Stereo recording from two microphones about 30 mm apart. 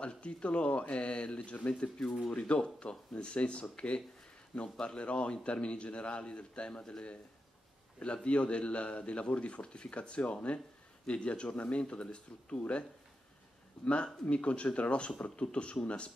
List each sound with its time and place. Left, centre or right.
0.0 s a man's voice: left
8.0 s a man's voice: left
11.4 s speech: left
11.8 s speech: left
13.8 s a man's voice: left